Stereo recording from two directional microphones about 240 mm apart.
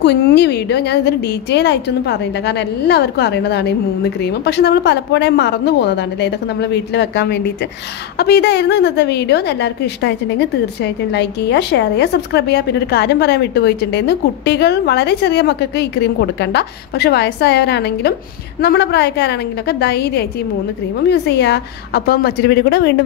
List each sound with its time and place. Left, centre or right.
0.0 s a woman's voice: left